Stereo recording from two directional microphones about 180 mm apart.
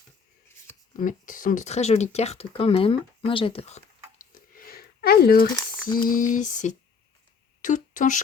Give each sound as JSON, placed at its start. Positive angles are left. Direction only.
{"t": 0.9, "sound": "speech", "side_deg": 45}
{"t": 6.0, "sound": "a sound", "side_deg": 50}
{"t": 7.6, "sound": "speech", "side_deg": 45}